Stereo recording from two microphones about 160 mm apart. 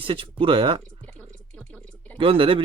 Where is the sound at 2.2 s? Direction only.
35° right (ahead or behind).